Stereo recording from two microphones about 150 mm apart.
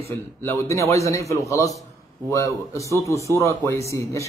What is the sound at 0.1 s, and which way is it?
A man's voice, 15° left (ahead or behind).